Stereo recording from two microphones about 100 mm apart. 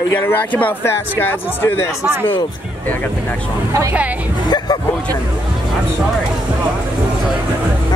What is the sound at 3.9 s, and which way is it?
Speech, 15° right (ahead or behind).